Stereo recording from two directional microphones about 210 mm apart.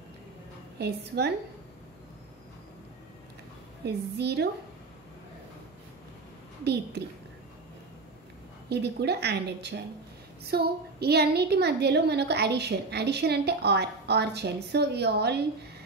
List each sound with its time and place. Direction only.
0.7 s a woman's voice: 50° right (ahead or behind)
3.8 s a woman's voice: 50° right (ahead or behind)
6.6 s a woman's voice: 50° right (ahead or behind)
8.6 s a woman's voice: 50° right (ahead or behind)